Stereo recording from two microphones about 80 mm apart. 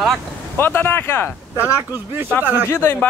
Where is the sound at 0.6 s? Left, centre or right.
Left.